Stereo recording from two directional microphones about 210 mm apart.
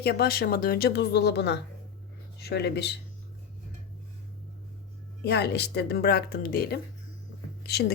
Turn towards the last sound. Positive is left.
turn(degrees=50)  # may be behind; listen again after turning